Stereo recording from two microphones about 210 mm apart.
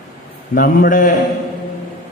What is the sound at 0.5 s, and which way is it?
Speech, 40° left (ahead or behind).